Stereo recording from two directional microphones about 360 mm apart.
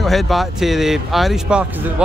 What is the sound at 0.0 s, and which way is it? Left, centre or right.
Speech, centre.